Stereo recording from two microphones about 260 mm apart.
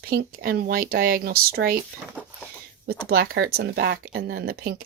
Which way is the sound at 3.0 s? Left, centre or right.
Right.